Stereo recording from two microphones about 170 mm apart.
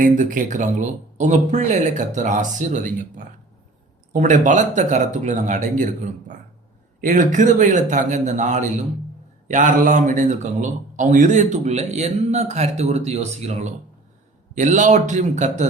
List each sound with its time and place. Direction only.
0.0 s speech: 50° right (ahead or behind)